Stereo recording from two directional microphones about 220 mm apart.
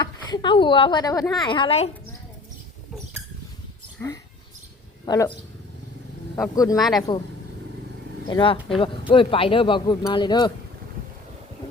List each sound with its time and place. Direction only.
0.0 s a woman's voice: 20° left (ahead or behind)
5.0 s speech: 15° left (ahead or behind)
6.3 s speech: 15° left (ahead or behind)
6.7 s speech: centre (ahead or behind)
8.3 s speech: 20° left (ahead or behind)